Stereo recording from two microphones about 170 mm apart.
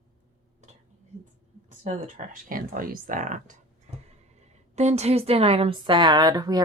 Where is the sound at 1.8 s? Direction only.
50° right (ahead or behind).